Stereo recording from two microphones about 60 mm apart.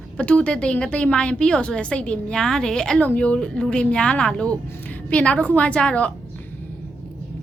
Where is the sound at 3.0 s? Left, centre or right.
Left.